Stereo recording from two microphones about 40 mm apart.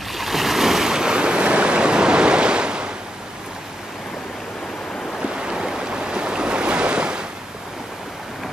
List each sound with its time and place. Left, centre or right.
0.1 s waves: centre
0.9 s waves: right
5.3 s waves: centre